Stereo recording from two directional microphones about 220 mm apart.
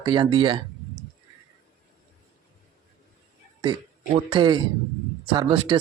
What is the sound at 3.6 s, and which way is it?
Speech, 20° right (ahead or behind).